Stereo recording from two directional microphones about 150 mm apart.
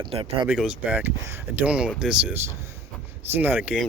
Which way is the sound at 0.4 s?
5° right (ahead or behind).